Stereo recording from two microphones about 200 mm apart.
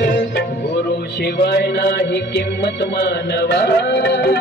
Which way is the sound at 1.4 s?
55° left (ahead or behind).